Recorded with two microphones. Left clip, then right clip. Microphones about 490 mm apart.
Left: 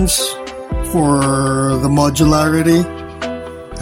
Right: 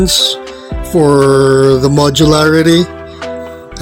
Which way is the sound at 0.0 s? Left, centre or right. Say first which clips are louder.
Right 7 dB; left.